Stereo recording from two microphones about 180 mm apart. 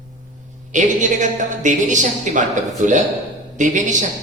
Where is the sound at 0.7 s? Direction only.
45° right (ahead or behind).